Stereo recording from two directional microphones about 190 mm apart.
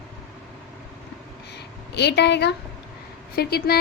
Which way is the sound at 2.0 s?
60° left (ahead or behind).